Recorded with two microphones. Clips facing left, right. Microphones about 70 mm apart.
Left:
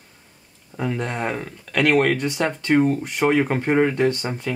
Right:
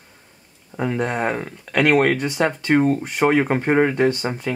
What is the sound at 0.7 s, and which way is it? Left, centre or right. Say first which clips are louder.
Speech: right 3 dB; centre.